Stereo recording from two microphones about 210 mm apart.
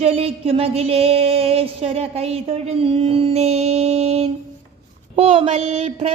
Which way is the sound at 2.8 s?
30° right (ahead or behind).